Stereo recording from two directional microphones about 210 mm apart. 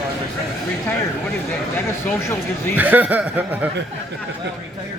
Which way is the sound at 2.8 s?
10° right (ahead or behind).